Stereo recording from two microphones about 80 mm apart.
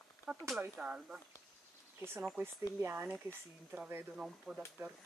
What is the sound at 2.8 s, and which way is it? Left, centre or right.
Speech, right.